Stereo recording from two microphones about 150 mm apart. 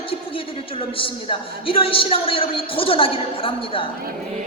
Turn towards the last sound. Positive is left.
turn(degrees=40)  # may be behind; listen again after turning